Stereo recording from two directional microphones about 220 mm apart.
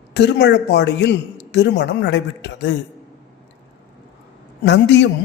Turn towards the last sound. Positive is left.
turn(degrees=50)  # may be behind; listen again after turning